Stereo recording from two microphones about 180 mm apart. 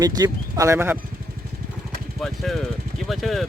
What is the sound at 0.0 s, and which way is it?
Speech, 20° right (ahead or behind).